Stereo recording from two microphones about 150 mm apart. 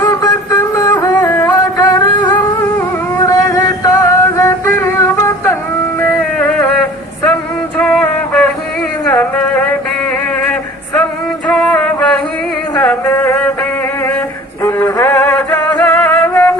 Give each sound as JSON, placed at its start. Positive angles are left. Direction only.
{"t": 0.0, "sound": "music", "side_deg": 20}
{"t": 1.9, "sound": "humming", "side_deg": 20}
{"t": 3.2, "sound": "music", "side_deg": 20}
{"t": 6.0, "sound": "a sound", "side_deg": 10}
{"t": 7.8, "sound": "music", "side_deg": 10}
{"t": 9.0, "sound": "a sound", "side_deg": 10}
{"t": 11.4, "sound": "music", "side_deg": 5}
{"t": 14.6, "sound": "music", "side_deg": 20}